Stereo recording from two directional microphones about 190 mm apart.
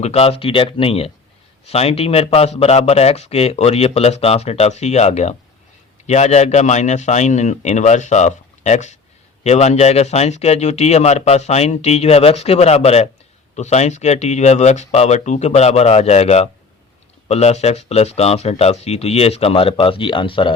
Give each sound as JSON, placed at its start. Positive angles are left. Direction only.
{"t": 0.0, "sound": "speech", "side_deg": 30}